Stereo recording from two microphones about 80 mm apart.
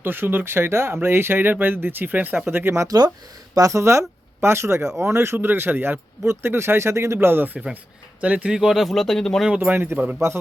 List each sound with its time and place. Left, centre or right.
0.0 s speech: right
2.8 s speech: right
3.5 s speech: right
8.2 s speech: centre
9.5 s speech: centre
9.7 s speech: right
10.3 s speech: right